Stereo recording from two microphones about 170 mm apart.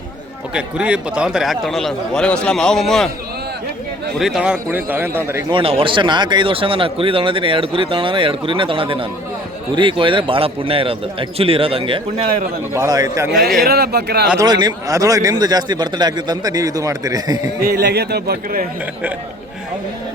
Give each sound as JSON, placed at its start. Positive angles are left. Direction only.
{"t": 0.5, "sound": "a man's voice", "side_deg": -5}
{"t": 4.2, "sound": "a man's voice", "side_deg": -5}
{"t": 5.5, "sound": "speech", "side_deg": -30}
{"t": 12.7, "sound": "a man's voice", "side_deg": -20}
{"t": 13.7, "sound": "speech", "side_deg": -65}
{"t": 14.3, "sound": "a man's voice", "side_deg": -25}
{"t": 17.6, "sound": "speech", "side_deg": -70}